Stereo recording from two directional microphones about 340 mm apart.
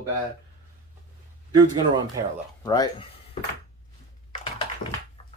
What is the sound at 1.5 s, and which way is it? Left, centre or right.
Speech, centre.